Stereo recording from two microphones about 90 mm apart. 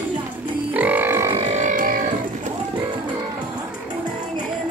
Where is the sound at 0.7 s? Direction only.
20° right (ahead or behind).